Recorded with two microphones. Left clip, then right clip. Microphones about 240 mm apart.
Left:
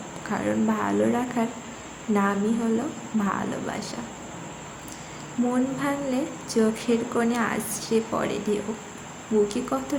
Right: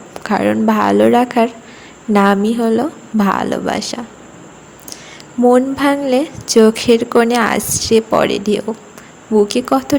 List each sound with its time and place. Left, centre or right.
0.2 s a woman's voice: right
5.7 s a woman's voice: right